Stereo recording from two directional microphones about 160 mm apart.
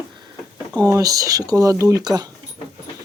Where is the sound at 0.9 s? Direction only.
20° right (ahead or behind).